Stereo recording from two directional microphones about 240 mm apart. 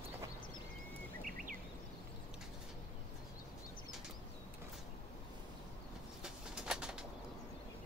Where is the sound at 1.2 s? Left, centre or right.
Right.